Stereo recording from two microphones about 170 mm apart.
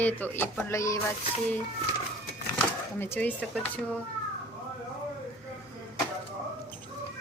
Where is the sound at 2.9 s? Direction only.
15° left (ahead or behind).